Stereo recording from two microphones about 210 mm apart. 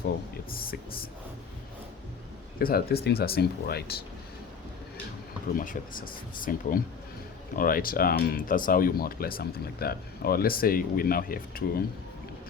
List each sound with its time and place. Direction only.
2.6 s speech: 45° left (ahead or behind)
5.5 s speech: 40° left (ahead or behind)